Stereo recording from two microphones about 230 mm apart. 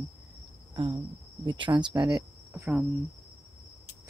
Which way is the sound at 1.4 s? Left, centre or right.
Right.